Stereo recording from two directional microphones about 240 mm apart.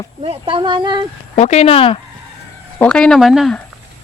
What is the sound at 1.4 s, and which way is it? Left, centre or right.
Speech, left.